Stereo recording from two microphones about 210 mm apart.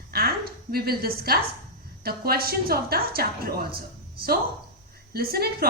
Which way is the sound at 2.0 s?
45° right (ahead or behind).